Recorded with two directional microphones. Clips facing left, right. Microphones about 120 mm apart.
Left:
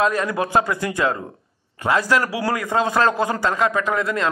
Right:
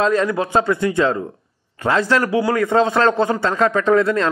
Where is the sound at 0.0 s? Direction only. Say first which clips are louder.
Right 3 dB; 30° right (ahead or behind).